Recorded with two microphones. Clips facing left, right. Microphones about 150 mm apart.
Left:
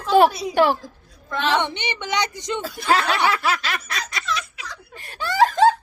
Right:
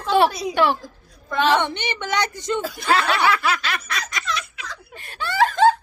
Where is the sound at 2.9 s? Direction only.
40° left (ahead or behind).